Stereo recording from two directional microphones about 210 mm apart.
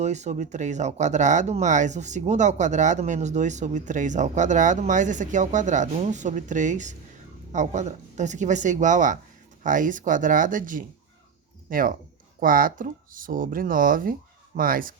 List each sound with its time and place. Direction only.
0.0 s speech: 35° right (ahead or behind)